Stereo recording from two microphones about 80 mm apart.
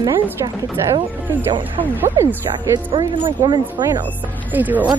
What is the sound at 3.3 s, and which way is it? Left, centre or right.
Speech, right.